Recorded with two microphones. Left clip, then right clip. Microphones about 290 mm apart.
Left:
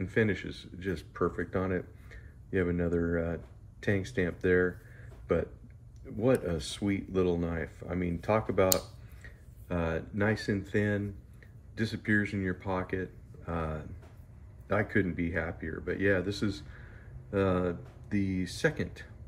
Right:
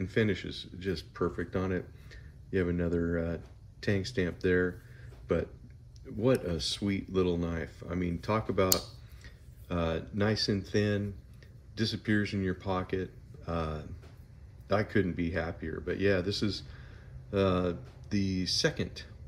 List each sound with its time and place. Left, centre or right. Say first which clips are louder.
0.0 s speech: left 1 dB; centre
6.0 s speech: left 1 dB; centre